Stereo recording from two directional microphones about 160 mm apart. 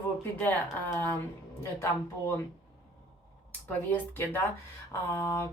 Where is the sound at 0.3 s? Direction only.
10° left (ahead or behind).